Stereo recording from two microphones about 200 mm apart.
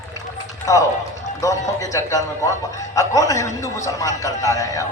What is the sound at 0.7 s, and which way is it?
A man's voice, 15° left (ahead or behind).